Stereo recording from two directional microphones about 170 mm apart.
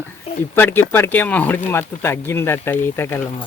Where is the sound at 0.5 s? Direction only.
10° left (ahead or behind).